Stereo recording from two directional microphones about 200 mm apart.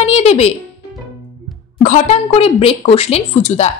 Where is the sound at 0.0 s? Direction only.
30° left (ahead or behind).